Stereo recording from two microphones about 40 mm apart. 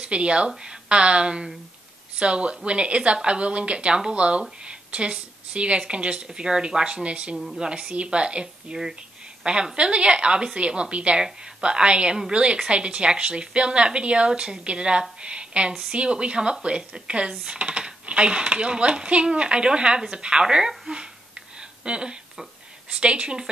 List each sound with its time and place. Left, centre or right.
0.0 s a woman's voice: right
7.3 s a woman's voice: centre
20.9 s a sound: right
22.9 s a woman's voice: right